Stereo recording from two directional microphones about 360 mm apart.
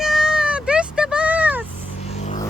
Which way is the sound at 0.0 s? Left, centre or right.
Centre.